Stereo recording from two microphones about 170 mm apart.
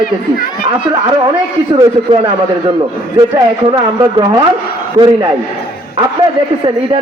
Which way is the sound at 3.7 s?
25° right (ahead or behind).